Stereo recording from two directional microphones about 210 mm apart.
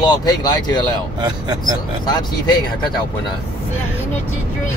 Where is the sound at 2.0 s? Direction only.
20° left (ahead or behind).